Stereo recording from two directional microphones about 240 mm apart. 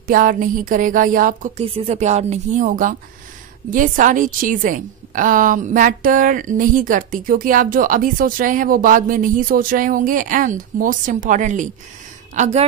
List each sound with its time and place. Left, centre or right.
0.0 s a woman's voice: right